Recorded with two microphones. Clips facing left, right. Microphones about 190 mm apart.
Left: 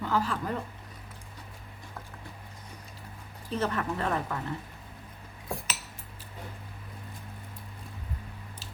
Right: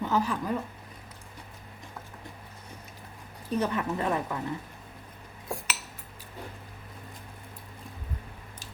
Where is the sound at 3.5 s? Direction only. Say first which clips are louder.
Right 2 dB; 15° right (ahead or behind).